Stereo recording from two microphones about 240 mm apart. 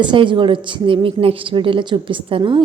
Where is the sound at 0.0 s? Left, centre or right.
Centre.